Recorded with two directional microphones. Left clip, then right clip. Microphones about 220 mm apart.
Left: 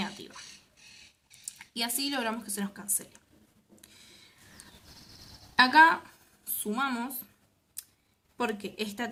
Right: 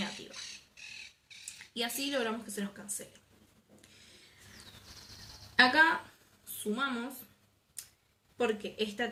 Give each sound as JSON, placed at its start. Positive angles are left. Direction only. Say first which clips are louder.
{"t": 1.5, "sound": "speech", "louder": "left 3 dB", "side_deg": 50}
{"t": 5.5, "sound": "speech", "louder": "left 5 dB", "side_deg": 65}
{"t": 8.4, "sound": "speech", "louder": "even", "side_deg": 55}